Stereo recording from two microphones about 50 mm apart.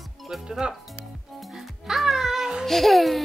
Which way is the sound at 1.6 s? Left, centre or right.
Centre.